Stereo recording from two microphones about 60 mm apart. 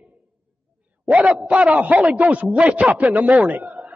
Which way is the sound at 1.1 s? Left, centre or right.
Right.